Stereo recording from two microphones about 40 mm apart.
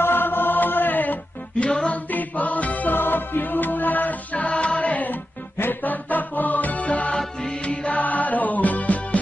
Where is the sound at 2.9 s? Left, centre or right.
Left.